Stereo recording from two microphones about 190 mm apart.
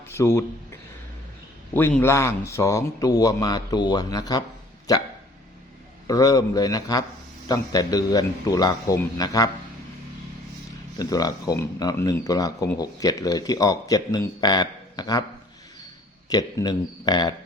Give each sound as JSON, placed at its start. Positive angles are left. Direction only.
{"t": 0.1, "sound": "speech", "side_deg": 15}
{"t": 6.1, "sound": "speech", "side_deg": 20}
{"t": 10.9, "sound": "speech", "side_deg": 20}
{"t": 16.3, "sound": "speech", "side_deg": 20}